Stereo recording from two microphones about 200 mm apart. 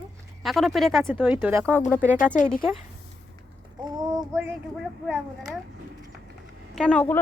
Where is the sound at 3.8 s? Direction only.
20° right (ahead or behind).